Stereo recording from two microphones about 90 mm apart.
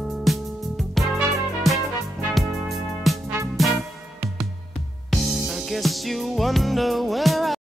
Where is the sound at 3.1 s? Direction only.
Centre (ahead or behind).